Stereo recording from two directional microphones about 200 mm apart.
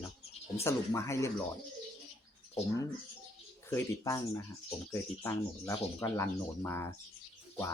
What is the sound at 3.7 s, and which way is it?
Speech, 15° left (ahead or behind).